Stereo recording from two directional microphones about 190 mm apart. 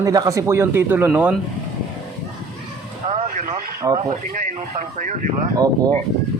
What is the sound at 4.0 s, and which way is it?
Speech, 40° right (ahead or behind).